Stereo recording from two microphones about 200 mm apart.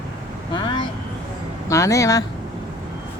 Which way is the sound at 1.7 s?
15° left (ahead or behind).